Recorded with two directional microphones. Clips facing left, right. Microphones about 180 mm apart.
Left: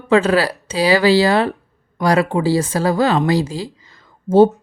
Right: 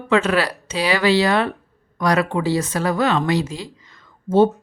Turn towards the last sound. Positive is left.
turn(degrees=30)  # may be behind; listen again after turning